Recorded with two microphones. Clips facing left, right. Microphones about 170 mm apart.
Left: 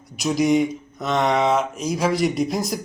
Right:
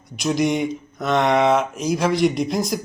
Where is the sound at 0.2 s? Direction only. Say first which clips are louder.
Left 2 dB; 5° left (ahead or behind).